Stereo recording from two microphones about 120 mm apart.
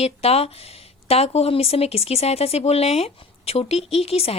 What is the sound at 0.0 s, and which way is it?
Speech, 60° left (ahead or behind).